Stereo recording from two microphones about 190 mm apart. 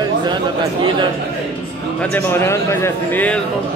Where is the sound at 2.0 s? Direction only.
10° left (ahead or behind).